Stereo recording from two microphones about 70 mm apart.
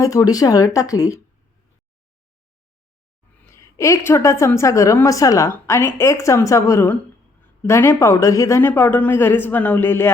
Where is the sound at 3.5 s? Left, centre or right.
Left.